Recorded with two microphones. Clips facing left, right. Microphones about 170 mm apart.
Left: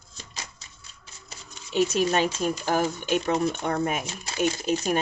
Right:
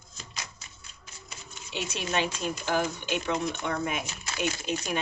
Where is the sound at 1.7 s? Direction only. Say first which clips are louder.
Left 8 dB; 40° left (ahead or behind).